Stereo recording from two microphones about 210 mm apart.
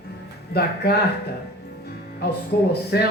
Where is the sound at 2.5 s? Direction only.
55° left (ahead or behind).